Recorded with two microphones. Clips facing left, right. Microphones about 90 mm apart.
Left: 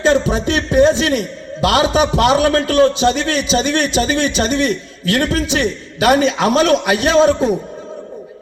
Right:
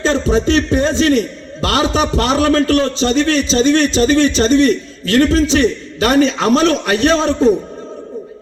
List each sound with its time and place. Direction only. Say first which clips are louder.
0.0 s a man's voice: even; 15° left (ahead or behind)